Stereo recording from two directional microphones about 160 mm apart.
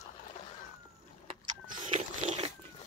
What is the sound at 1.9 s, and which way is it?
Biting, 50° right (ahead or behind).